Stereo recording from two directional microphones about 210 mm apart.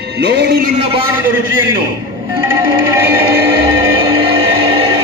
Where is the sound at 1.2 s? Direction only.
10° right (ahead or behind).